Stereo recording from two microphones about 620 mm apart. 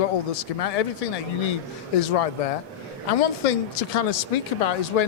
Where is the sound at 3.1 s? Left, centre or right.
Left.